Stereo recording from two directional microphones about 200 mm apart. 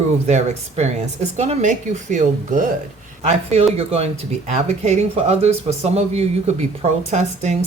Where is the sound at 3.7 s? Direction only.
30° right (ahead or behind).